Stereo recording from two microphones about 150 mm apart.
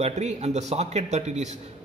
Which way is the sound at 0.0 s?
45° right (ahead or behind).